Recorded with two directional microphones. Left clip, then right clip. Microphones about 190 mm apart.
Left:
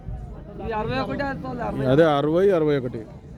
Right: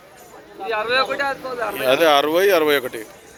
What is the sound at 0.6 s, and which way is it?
Speech, 60° left (ahead or behind).